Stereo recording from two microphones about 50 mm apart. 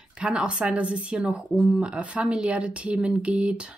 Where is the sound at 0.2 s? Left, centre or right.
Right.